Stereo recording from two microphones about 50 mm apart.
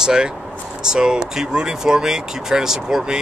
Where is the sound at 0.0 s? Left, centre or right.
Centre.